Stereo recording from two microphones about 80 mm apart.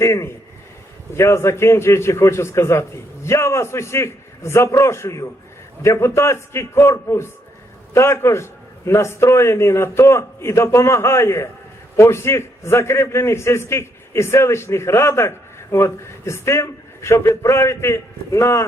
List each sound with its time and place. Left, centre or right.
0.0 s a man's voice: left